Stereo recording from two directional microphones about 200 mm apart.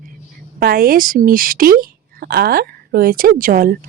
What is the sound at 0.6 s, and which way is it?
Speech, 45° right (ahead or behind).